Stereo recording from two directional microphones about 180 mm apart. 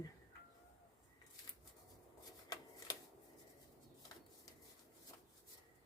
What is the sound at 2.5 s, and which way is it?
Shuffling cards, 20° left (ahead or behind).